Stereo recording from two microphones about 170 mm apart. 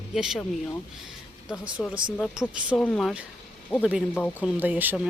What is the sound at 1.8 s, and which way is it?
Speech, 5° left (ahead or behind).